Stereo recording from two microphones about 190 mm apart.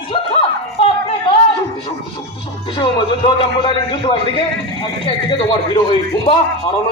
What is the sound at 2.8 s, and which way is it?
A man's voice, 30° left (ahead or behind).